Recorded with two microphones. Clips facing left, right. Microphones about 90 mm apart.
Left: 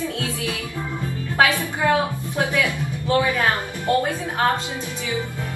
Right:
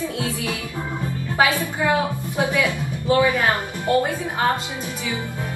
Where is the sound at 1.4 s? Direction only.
20° right (ahead or behind).